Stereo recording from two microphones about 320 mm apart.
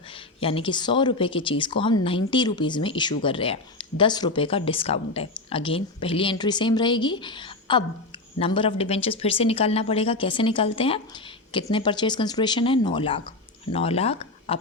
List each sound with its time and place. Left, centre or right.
0.3 s speech: centre